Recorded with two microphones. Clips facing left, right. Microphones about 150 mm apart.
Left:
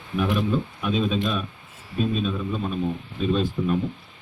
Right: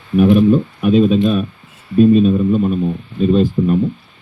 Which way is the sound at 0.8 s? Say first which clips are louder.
Right 13 dB; 45° right (ahead or behind).